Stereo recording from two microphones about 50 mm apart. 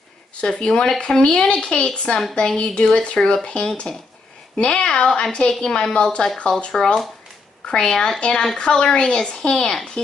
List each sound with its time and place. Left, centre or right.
0.4 s a woman's voice: centre